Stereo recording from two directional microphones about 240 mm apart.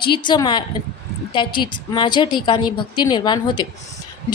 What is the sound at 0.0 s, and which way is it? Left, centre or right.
A woman's voice, centre.